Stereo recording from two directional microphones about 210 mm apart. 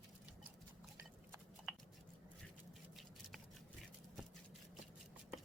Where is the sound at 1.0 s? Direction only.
10° right (ahead or behind).